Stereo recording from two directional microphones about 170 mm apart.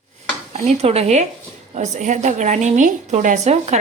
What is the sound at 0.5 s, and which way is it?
A woman's voice, 40° right (ahead or behind).